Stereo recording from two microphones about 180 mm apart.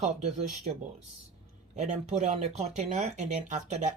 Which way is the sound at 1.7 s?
40° right (ahead or behind).